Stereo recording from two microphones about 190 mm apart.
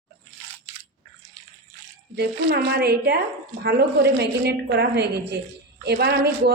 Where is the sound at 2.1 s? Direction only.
60° right (ahead or behind).